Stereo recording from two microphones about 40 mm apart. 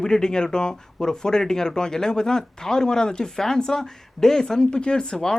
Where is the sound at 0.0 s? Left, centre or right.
Centre.